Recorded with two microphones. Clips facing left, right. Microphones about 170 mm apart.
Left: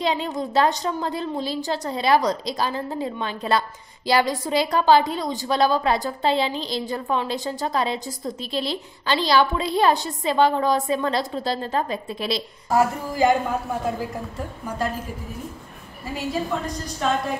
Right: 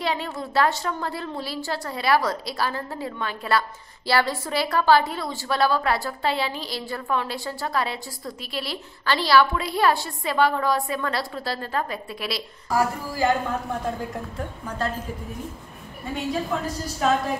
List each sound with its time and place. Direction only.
0.0 s a woman's voice: 20° left (ahead or behind)
16.1 s a woman's voice: centre (ahead or behind)